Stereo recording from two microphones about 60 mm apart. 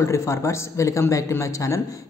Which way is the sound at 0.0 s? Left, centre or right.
Left.